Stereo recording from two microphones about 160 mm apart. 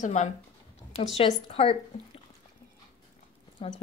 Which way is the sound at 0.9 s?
35° left (ahead or behind).